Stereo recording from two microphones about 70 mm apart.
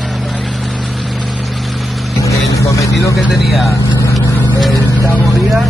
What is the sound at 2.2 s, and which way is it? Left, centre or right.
Vehicle, left.